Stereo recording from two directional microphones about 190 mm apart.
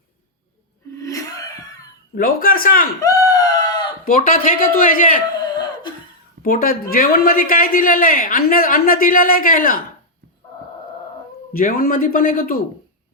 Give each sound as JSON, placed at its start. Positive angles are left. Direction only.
{"t": 0.9, "sound": "a sound", "side_deg": 20}
{"t": 2.1, "sound": "a woman's voice", "side_deg": 50}
{"t": 3.0, "sound": "screaming", "side_deg": 20}
{"t": 4.0, "sound": "a woman's voice", "side_deg": 50}
{"t": 6.4, "sound": "a woman's voice", "side_deg": 45}
{"t": 11.5, "sound": "a woman's voice", "side_deg": 50}